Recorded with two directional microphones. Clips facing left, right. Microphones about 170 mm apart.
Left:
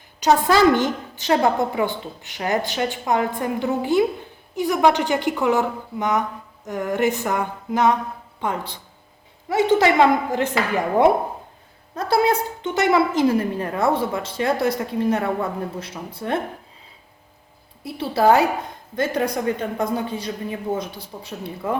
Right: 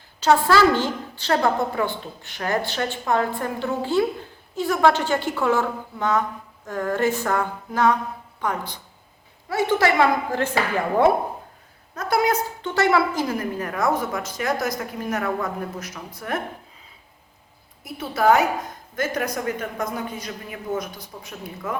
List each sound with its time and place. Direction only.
0.2 s a woman's voice: 15° left (ahead or behind)
11.9 s a woman's voice: 30° left (ahead or behind)
17.8 s a woman's voice: 30° left (ahead or behind)